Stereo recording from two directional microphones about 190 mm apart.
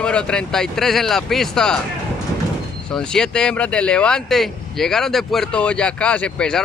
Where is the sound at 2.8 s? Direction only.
5° left (ahead or behind).